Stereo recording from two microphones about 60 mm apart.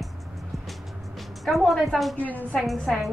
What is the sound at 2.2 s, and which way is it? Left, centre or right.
Speech, left.